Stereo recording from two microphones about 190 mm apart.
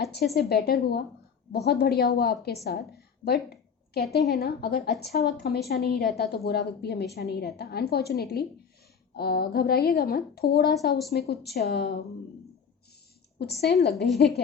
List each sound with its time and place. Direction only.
0.0 s a sound: 60° left (ahead or behind)
0.3 s a woman's voice: 60° left (ahead or behind)
13.4 s a woman's voice: 60° left (ahead or behind)